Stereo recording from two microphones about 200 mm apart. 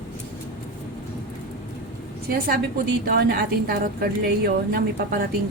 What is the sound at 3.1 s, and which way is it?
A woman's voice, 50° right (ahead or behind).